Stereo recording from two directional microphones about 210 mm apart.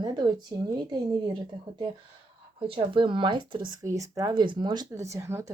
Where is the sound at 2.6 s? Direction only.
25° right (ahead or behind).